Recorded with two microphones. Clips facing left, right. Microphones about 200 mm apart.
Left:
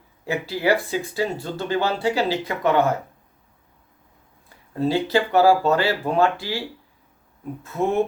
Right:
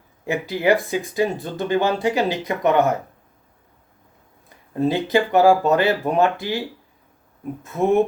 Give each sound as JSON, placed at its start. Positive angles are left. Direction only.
{"t": 0.3, "sound": "speech", "side_deg": -15}
{"t": 4.4, "sound": "speech", "side_deg": -15}
{"t": 7.6, "sound": "speech", "side_deg": -15}